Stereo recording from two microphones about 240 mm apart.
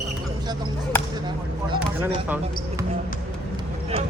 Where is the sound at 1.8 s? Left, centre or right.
Centre.